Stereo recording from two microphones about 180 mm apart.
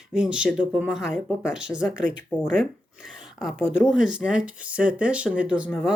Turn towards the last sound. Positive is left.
turn(degrees=-5)  # may be behind; listen again after turning